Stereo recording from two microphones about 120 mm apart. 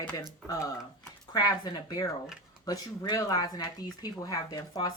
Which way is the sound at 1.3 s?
35° left (ahead or behind).